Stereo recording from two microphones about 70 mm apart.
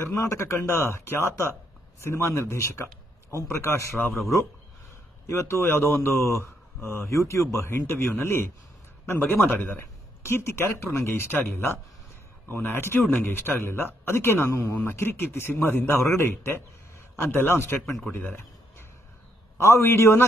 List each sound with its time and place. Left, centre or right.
0.1 s speech: left
5.2 s speech: left
18.1 s a sound: left
19.6 s speech: left